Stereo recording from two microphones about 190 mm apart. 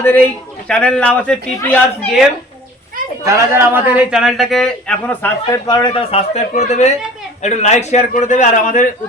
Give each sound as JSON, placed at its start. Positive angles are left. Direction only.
{"t": 0.0, "sound": "a man's voice", "side_deg": 10}
{"t": 3.2, "sound": "a man's voice", "side_deg": -15}
{"t": 5.6, "sound": "a man's voice", "side_deg": 20}